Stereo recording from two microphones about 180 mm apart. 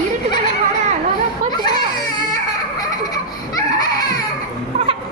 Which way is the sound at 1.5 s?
25° left (ahead or behind).